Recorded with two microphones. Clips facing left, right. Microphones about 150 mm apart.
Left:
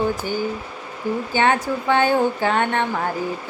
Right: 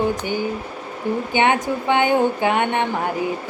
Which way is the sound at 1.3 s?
20° right (ahead or behind).